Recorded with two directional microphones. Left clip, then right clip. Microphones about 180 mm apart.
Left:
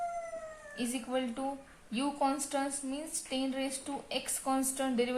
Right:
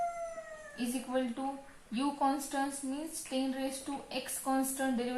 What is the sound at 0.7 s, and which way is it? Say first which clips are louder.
A woman's voice: even; 50° left (ahead or behind).